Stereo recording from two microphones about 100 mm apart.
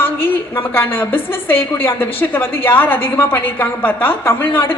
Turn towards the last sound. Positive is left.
turn(degrees=20)  # may be behind; listen again after turning